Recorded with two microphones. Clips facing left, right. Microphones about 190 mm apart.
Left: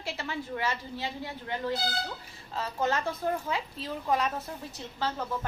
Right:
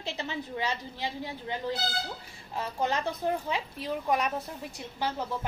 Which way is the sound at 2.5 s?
15° right (ahead or behind).